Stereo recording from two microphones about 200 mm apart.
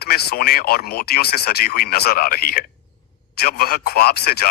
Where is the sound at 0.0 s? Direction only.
55° left (ahead or behind).